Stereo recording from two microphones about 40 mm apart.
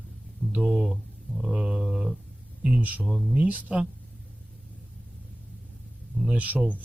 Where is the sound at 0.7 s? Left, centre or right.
Centre.